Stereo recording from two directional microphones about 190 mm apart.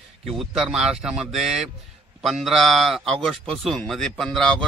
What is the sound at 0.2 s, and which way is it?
A man's voice, centre (ahead or behind).